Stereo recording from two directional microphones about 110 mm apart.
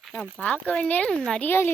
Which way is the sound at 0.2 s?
15° left (ahead or behind).